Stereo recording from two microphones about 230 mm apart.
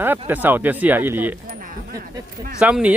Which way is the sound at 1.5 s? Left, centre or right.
Right.